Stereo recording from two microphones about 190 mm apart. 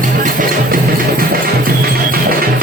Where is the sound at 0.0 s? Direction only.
45° right (ahead or behind).